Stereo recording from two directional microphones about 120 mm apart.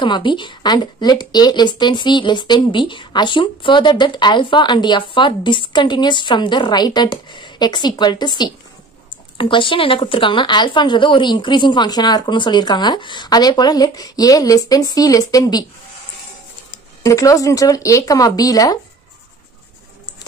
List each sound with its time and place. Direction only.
0.0 s a woman's voice: 40° left (ahead or behind)
17.0 s speech: 25° left (ahead or behind)